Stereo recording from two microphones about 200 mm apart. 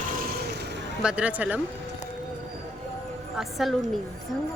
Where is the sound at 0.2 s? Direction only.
50° right (ahead or behind).